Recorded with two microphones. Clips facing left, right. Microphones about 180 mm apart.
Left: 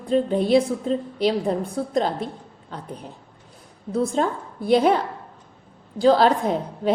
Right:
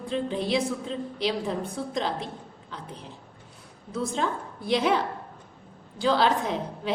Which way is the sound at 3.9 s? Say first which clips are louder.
Left 6 dB; 45° left (ahead or behind).